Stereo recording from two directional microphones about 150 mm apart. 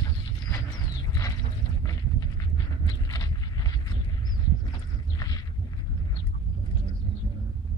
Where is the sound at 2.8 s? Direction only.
25° left (ahead or behind).